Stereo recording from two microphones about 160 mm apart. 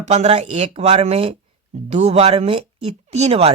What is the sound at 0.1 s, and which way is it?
Speech, 45° right (ahead or behind).